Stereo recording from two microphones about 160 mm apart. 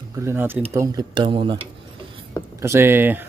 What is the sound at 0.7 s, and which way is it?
Speech, 25° right (ahead or behind).